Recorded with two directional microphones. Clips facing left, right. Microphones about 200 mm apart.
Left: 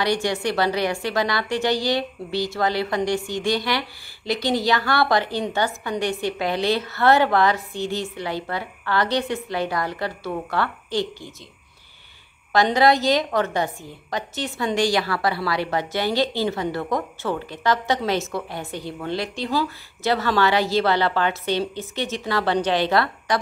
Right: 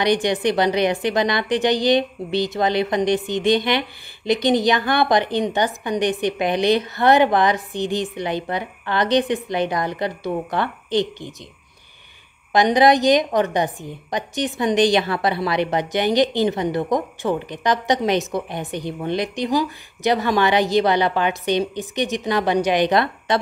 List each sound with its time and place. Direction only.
0.0 s a woman's voice: 20° right (ahead or behind)
12.5 s a woman's voice: 15° right (ahead or behind)